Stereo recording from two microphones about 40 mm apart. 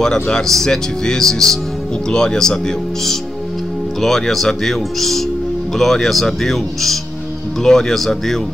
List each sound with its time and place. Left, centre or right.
0.0 s speech: centre